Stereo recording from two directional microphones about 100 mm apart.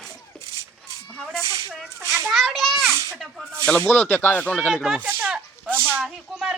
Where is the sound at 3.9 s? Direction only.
15° left (ahead or behind).